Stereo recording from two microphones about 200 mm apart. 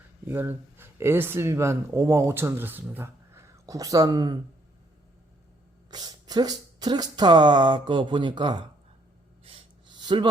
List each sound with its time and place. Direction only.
0.3 s speech: 10° right (ahead or behind)
5.9 s speech: 20° right (ahead or behind)
10.0 s a man's voice: 20° right (ahead or behind)